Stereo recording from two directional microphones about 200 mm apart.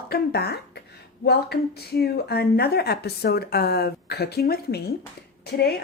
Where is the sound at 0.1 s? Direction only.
55° left (ahead or behind).